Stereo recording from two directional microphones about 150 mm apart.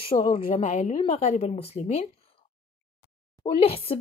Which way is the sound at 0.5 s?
50° left (ahead or behind).